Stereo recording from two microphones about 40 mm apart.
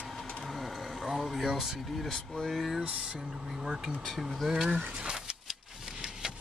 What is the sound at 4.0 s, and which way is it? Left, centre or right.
Speech, centre.